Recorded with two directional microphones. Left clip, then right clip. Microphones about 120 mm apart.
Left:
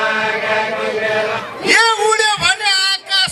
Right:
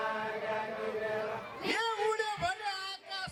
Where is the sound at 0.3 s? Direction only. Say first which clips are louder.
Left 19 dB; 35° left (ahead or behind).